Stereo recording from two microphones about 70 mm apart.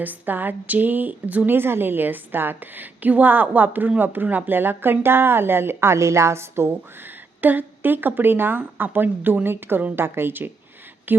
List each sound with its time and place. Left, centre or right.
0.0 s a woman's voice: right
7.4 s a woman's voice: right